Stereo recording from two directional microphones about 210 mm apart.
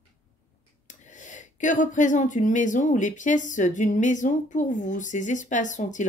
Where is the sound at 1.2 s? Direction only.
35° left (ahead or behind).